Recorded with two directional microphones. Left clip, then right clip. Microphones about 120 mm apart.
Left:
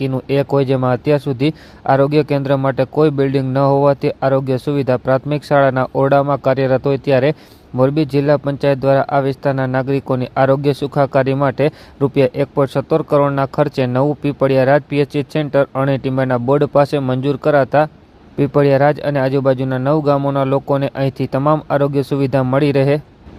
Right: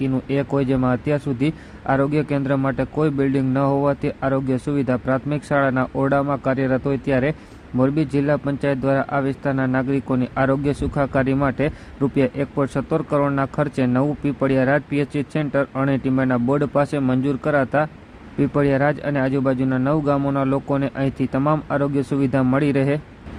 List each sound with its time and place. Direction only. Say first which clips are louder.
0.0 s speech: left 5 dB; 45° left (ahead or behind)